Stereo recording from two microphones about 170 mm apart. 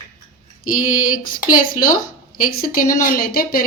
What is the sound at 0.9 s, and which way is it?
A woman's voice, 55° left (ahead or behind).